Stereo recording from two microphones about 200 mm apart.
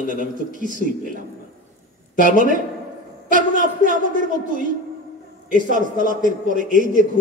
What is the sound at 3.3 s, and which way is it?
A woman's voice, 40° right (ahead or behind).